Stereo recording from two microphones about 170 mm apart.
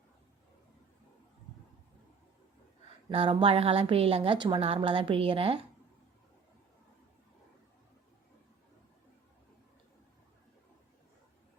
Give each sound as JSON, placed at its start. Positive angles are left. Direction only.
{"t": 3.1, "sound": "a woman's voice", "side_deg": -35}